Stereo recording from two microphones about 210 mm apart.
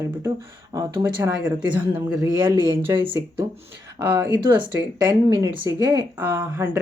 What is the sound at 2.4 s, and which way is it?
Speech, 25° right (ahead or behind).